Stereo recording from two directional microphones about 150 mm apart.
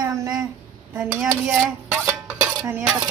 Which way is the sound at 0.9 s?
10° right (ahead or behind).